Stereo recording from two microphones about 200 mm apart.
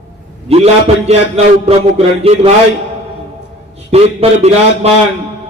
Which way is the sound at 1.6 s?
30° right (ahead or behind).